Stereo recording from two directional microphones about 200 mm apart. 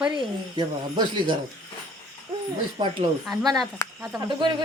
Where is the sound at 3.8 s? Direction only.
15° left (ahead or behind).